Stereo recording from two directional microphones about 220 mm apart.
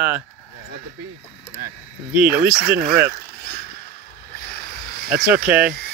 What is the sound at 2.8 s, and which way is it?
Speech, 45° right (ahead or behind).